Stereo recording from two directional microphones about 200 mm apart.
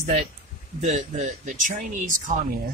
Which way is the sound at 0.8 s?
35° right (ahead or behind).